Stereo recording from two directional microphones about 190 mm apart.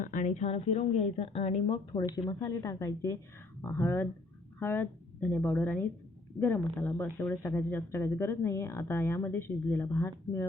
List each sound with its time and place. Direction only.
0.0 s speech: 40° left (ahead or behind); by 10.4 s 15° left (ahead or behind)